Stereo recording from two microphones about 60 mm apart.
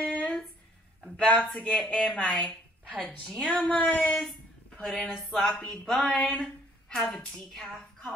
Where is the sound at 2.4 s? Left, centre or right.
Left.